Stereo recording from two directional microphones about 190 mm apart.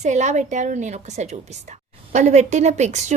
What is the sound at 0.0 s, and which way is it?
A woman's voice, 40° right (ahead or behind).